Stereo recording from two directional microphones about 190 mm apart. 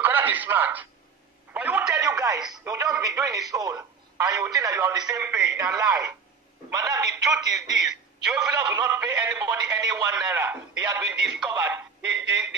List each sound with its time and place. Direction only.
0.0 s speech: 10° right (ahead or behind)
1.5 s a sound: 10° right (ahead or behind)
2.5 s speech: 15° right (ahead or behind)
11.2 s speech: 5° right (ahead or behind)